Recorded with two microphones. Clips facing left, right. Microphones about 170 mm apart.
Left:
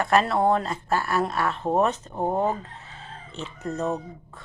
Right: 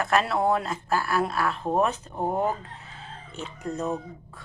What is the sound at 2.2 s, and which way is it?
Speech, 25° left (ahead or behind).